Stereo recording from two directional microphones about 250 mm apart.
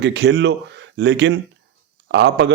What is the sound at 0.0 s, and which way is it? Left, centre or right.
A man's voice, right.